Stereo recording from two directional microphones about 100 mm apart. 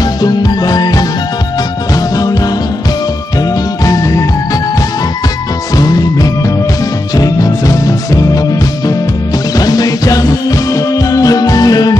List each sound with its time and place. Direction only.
0.2 s music: 40° left (ahead or behind)
3.8 s music: 35° left (ahead or behind)
5.8 s music: 40° left (ahead or behind)
9.6 s music: 40° left (ahead or behind)